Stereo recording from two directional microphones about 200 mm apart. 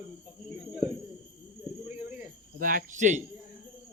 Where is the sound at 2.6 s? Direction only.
45° right (ahead or behind).